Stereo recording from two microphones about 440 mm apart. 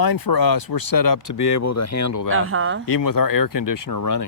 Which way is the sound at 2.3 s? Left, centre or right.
Right.